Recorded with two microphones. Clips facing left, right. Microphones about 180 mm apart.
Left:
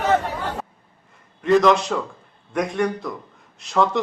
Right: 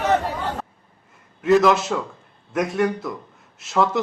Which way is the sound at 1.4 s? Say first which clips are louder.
Even; 5° right (ahead or behind).